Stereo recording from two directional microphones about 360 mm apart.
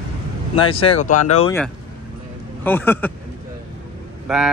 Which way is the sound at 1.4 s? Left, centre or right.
Centre.